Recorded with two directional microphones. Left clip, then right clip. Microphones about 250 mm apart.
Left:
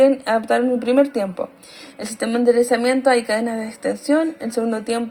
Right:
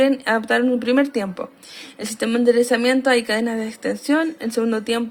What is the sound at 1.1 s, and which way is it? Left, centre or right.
Speech, right.